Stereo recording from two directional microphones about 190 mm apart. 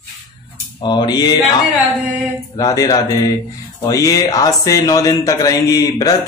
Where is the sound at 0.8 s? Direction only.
25° left (ahead or behind).